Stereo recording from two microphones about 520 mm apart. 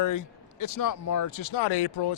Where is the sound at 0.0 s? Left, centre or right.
Left.